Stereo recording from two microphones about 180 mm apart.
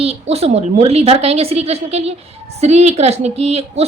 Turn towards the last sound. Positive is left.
turn(degrees=-35)  # may be behind; listen again after turning